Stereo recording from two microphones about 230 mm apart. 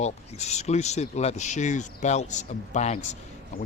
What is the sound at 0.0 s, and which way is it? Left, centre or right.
Speech, left.